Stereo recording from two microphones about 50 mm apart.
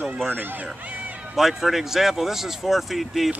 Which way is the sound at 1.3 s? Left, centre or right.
Centre.